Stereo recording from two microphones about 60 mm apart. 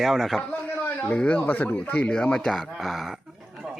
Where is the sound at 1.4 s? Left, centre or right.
Left; by 3.1 s centre.